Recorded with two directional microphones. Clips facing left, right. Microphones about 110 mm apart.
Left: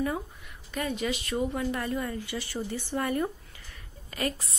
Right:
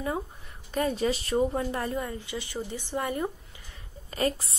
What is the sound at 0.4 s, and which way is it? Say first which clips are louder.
A woman's voice: right 5 dB; 35° right (ahead or behind).